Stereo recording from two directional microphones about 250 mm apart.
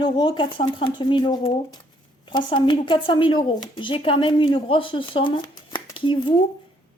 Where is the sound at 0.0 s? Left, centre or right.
Centre.